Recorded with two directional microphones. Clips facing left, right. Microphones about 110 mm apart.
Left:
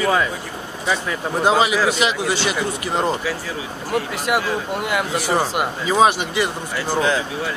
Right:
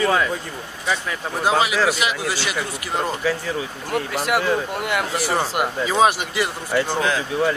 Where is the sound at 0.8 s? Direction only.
10° left (ahead or behind).